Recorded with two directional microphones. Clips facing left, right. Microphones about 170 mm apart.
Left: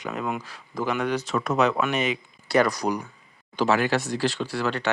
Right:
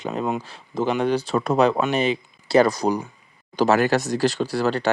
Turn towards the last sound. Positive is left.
turn(degrees=-35)  # may be behind; listen again after turning